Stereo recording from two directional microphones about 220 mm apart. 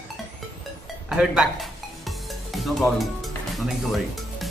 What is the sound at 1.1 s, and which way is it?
Music, 5° right (ahead or behind).